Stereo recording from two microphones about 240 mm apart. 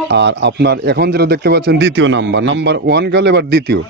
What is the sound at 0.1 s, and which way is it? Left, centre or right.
Speech, right.